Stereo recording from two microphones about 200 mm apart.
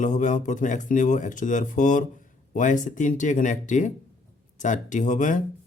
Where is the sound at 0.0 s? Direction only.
40° left (ahead or behind).